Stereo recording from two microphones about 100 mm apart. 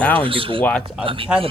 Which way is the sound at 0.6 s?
10° left (ahead or behind).